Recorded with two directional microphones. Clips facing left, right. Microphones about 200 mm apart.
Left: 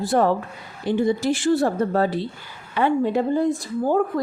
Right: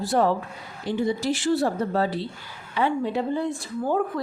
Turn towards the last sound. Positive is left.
turn(degrees=40)  # may be behind; listen again after turning